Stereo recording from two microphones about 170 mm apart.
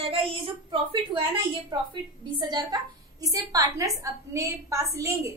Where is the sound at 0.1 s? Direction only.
30° right (ahead or behind).